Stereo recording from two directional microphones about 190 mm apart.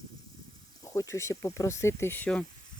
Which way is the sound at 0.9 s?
15° left (ahead or behind).